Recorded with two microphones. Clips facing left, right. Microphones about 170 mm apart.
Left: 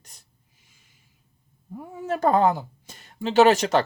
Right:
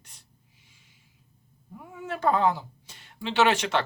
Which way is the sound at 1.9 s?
40° left (ahead or behind).